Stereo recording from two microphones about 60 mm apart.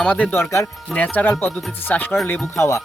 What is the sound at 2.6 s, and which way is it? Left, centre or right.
Music, left.